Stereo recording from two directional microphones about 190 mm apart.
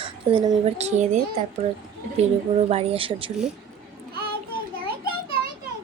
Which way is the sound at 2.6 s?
35° right (ahead or behind).